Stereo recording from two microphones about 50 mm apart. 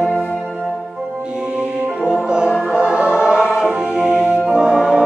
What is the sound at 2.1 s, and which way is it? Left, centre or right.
Music, centre.